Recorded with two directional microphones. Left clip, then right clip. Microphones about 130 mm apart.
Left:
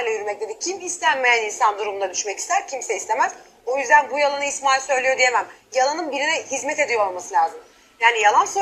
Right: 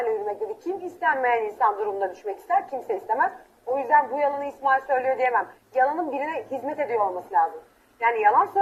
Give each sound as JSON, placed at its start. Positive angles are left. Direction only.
{"t": 0.0, "sound": "a woman's voice", "side_deg": 55}